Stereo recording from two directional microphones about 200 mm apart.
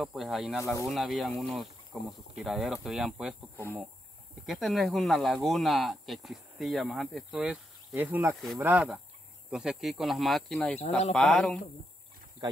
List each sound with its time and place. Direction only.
0.0 s speech: centre (ahead or behind)
0.6 s speech: 15° left (ahead or behind)
0.8 s speech: centre (ahead or behind)
4.5 s speech: centre (ahead or behind)
12.4 s speech: 50° left (ahead or behind)